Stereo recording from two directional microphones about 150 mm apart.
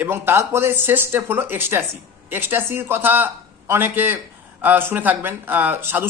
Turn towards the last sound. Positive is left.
turn(degrees=-10)  # may be behind; listen again after turning